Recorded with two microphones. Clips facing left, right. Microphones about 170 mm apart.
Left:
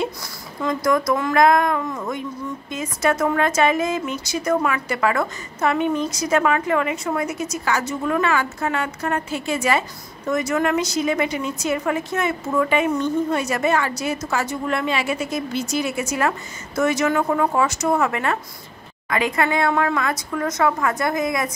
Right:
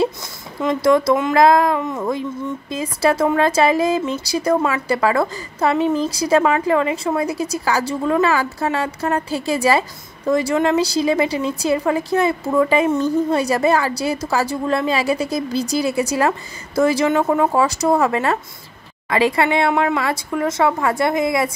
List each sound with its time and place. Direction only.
0.6 s a woman's voice: 25° right (ahead or behind)